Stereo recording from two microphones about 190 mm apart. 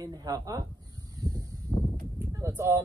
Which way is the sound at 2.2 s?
15° right (ahead or behind).